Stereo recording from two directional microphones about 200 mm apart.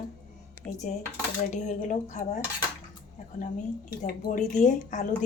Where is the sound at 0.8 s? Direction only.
40° left (ahead or behind).